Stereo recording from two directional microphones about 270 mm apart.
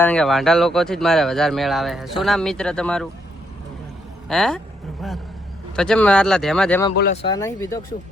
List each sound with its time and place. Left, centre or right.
0.0 s speech: centre
4.3 s speech: centre
6.9 s speech: left
7.2 s speech: centre